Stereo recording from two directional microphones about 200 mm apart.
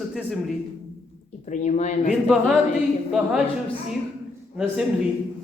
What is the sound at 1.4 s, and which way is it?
Speech, 35° left (ahead or behind).